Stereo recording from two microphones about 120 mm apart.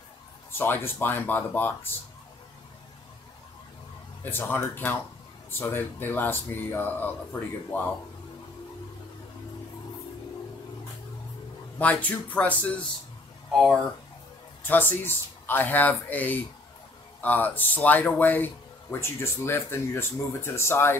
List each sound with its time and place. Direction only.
0.5 s speech: 20° left (ahead or behind)
4.2 s speech: 15° left (ahead or behind)
11.8 s speech: 10° left (ahead or behind)
13.5 s speech: centre (ahead or behind)
14.6 s speech: 15° left (ahead or behind)